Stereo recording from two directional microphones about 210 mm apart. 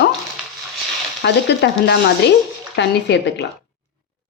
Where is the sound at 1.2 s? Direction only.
55° left (ahead or behind).